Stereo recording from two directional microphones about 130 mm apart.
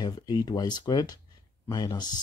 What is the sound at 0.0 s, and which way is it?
Speech, 30° left (ahead or behind).